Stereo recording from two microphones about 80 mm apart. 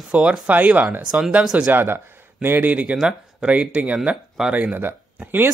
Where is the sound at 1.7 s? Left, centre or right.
Right.